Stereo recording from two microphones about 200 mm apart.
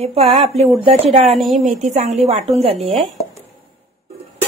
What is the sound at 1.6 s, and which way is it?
A woman's voice, 40° right (ahead or behind).